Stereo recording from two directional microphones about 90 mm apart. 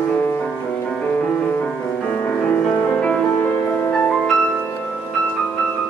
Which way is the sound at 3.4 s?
25° left (ahead or behind).